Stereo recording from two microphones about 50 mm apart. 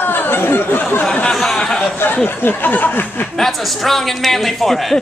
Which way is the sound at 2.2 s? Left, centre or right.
Left.